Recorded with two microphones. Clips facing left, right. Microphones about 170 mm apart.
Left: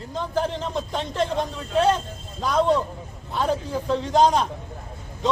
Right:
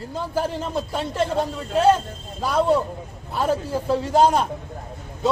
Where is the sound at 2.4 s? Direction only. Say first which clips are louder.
Right 1 dB; 10° right (ahead or behind).